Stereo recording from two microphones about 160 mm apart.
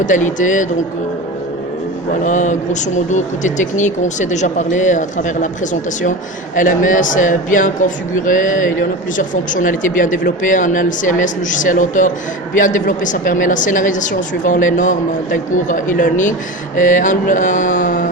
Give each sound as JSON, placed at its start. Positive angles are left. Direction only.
{"t": 0.0, "sound": "a woman's voice", "side_deg": 50}
{"t": 2.2, "sound": "a woman's voice", "side_deg": 50}
{"t": 6.6, "sound": "a woman's voice", "side_deg": 55}